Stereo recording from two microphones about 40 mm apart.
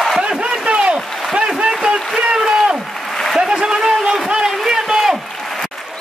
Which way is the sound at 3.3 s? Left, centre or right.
Centre.